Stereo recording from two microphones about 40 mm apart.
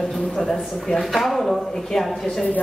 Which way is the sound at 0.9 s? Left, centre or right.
Centre.